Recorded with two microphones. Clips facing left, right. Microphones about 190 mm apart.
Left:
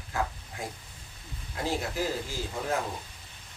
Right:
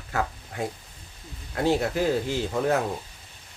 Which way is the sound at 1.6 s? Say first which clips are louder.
Right 8 dB; 65° right (ahead or behind).